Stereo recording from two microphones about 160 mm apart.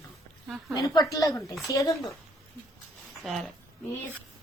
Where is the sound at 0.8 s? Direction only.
20° left (ahead or behind).